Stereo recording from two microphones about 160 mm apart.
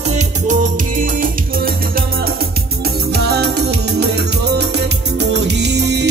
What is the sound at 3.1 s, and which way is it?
Music, 90° right.